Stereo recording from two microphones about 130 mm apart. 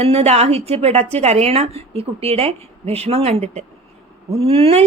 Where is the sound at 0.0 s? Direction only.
55° right (ahead or behind).